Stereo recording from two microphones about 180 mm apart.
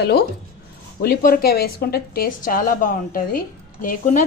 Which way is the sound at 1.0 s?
55° left (ahead or behind).